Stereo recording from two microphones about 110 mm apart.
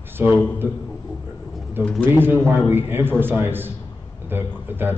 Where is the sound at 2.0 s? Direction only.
20° right (ahead or behind).